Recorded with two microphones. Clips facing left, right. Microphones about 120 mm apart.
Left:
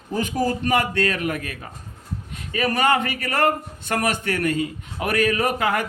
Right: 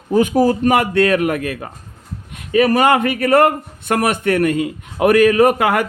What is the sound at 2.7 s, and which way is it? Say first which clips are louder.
A man's voice: right 6 dB; 50° right (ahead or behind).